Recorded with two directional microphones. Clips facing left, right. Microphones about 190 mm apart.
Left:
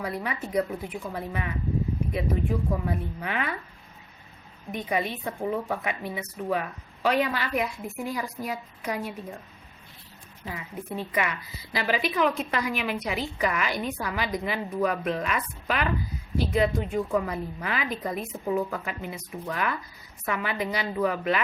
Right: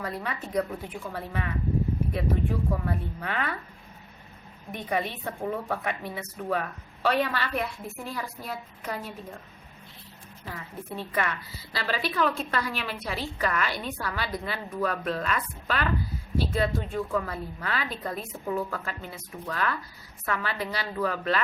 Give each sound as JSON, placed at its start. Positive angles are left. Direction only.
{"t": 0.0, "sound": "speech", "side_deg": 10}
{"t": 4.7, "sound": "speech", "side_deg": 10}
{"t": 10.5, "sound": "speech", "side_deg": 15}